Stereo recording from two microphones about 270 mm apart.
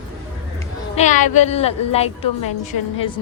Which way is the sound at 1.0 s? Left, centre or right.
Left.